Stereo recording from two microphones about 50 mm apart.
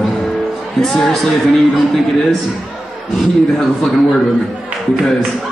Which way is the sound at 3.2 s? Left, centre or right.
Centre.